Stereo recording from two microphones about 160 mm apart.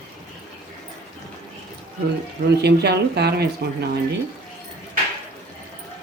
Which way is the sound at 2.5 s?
90° right.